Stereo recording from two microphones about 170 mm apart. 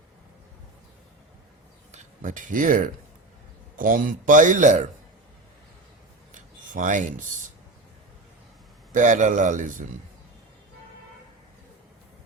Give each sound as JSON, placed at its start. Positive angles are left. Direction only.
{"t": 1.9, "sound": "a man's voice", "side_deg": -50}
{"t": 6.3, "sound": "filing", "side_deg": -50}
{"t": 8.9, "sound": "a man's voice", "side_deg": -50}